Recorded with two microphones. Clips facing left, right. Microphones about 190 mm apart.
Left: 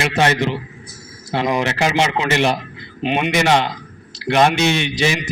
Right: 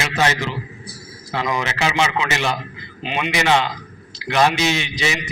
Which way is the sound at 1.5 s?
55° left (ahead or behind).